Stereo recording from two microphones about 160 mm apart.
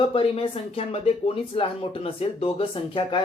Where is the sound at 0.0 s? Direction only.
35° left (ahead or behind).